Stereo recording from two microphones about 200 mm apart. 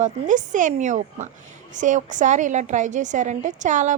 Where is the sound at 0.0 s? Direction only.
40° right (ahead or behind).